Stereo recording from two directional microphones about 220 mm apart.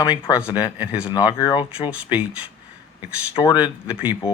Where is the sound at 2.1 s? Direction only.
5° right (ahead or behind).